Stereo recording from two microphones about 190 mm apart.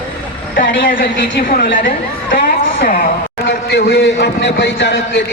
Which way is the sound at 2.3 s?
50° left (ahead or behind).